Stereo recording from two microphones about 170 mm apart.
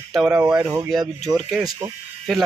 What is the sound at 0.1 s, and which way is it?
Speech, 5° right (ahead or behind).